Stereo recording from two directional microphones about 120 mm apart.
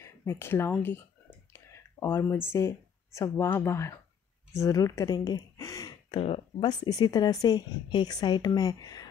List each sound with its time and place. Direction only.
0.0 s speech: 25° left (ahead or behind)
1.5 s a sound: 20° left (ahead or behind)
2.5 s speech: 25° left (ahead or behind)